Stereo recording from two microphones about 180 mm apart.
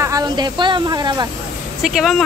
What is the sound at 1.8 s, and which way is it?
Speech, centre (ahead or behind).